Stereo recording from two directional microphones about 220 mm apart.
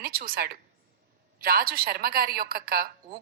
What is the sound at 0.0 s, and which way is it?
A woman's voice, 45° right (ahead or behind).